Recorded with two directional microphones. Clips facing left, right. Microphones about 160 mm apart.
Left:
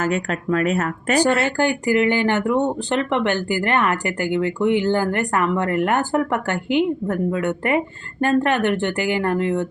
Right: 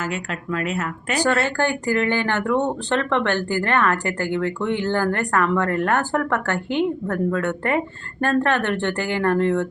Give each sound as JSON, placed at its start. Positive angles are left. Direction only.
{"t": 0.0, "sound": "speech", "side_deg": 45}
{"t": 1.2, "sound": "speech", "side_deg": 15}